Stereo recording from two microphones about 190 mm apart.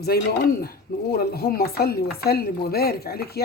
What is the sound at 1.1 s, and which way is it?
Speech, 55° left (ahead or behind).